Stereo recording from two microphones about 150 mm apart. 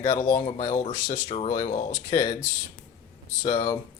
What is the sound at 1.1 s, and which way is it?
Speech, 45° left (ahead or behind).